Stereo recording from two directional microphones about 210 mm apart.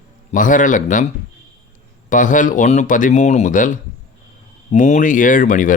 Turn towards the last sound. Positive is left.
turn(degrees=40)  # may be behind; listen again after turning